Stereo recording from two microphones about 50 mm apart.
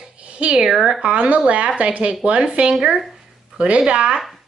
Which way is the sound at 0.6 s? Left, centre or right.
Centre.